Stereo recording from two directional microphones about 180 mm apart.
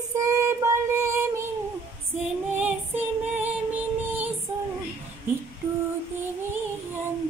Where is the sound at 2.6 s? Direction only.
10° right (ahead or behind).